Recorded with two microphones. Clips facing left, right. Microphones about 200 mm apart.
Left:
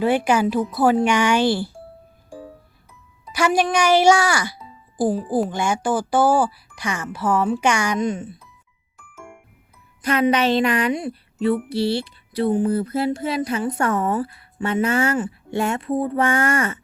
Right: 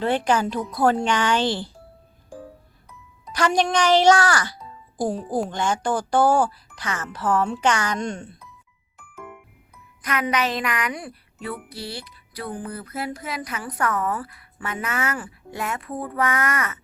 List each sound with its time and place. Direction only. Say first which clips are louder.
0.0 s speech: left 3 dB; 10° left (ahead or behind)
3.3 s speech: left 2 dB; 10° left (ahead or behind)
10.0 s a sound: left 6 dB; 30° left (ahead or behind)